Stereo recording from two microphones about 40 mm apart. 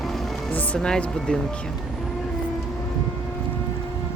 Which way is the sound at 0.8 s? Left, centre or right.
Centre.